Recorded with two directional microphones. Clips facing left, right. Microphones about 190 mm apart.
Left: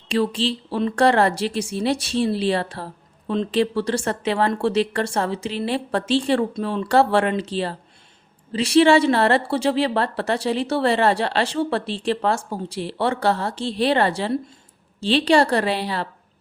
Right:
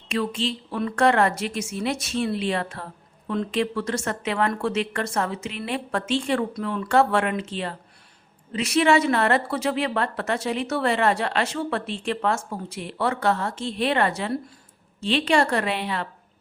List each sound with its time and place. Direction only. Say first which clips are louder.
0.1 s a woman's voice: left 4 dB; 30° left (ahead or behind)